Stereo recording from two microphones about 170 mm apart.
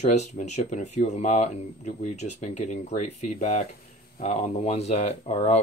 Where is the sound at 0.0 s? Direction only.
40° left (ahead or behind).